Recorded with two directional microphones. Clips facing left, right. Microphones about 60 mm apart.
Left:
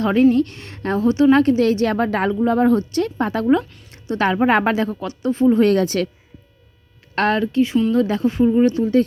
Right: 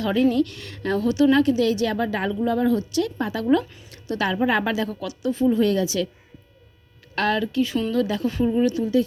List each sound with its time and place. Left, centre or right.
0.0 s a woman's voice: left
3.6 s a woman's voice: centre
3.9 s a sound: left
4.3 s a woman's voice: left
7.2 s a woman's voice: left